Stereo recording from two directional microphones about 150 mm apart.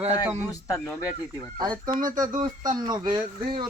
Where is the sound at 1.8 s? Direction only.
65° right (ahead or behind).